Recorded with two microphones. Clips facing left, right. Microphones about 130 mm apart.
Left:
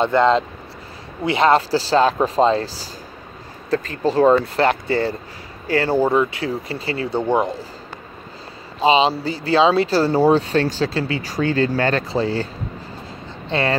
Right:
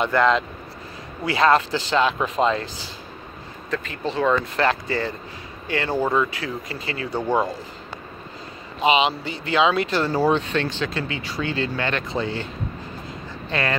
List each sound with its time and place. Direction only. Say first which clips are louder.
0.0 s speech: left 4 dB; 30° left (ahead or behind)
8.7 s speech: left 4 dB; 30° left (ahead or behind)
13.5 s speech: left 4 dB; 30° left (ahead or behind)